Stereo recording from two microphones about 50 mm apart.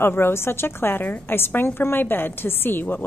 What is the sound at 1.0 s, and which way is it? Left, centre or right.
Speech, left.